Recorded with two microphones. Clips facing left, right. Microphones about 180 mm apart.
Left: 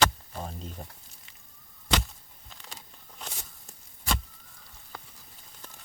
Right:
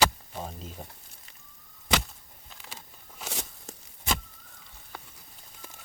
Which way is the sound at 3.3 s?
75° right (ahead or behind).